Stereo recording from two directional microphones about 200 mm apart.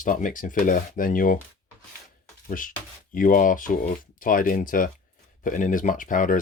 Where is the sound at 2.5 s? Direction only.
45° left (ahead or behind).